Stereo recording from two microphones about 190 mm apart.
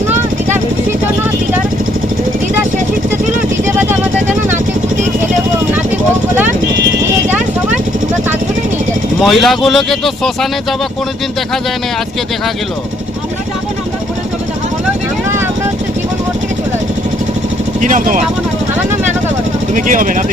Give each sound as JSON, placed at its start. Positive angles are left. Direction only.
{"t": 9.2, "sound": "speech", "side_deg": 0}
{"t": 17.7, "sound": "speech", "side_deg": -40}
{"t": 19.7, "sound": "speech", "side_deg": -45}